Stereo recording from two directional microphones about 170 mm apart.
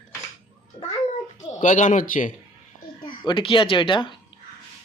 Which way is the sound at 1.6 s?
45° left (ahead or behind).